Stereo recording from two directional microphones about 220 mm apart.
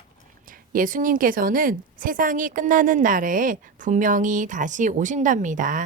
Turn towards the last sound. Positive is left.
turn(degrees=-35)  # may be behind; listen again after turning